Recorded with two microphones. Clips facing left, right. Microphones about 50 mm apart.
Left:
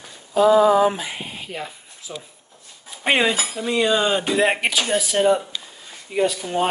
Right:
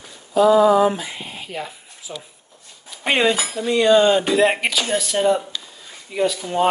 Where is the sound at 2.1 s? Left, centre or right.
Centre.